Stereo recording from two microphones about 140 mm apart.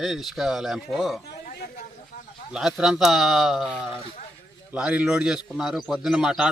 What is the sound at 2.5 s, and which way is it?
A man's voice, 5° right (ahead or behind).